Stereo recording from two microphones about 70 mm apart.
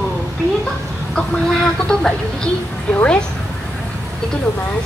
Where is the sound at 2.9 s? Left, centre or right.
Centre.